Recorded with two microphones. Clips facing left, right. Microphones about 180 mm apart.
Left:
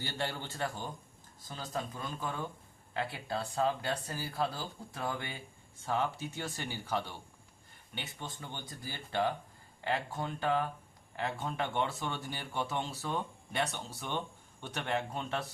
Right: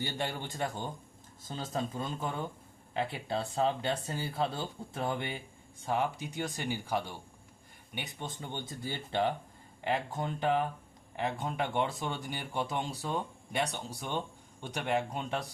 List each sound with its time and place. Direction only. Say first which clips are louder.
0.0 s speech: right 2 dB; 15° right (ahead or behind)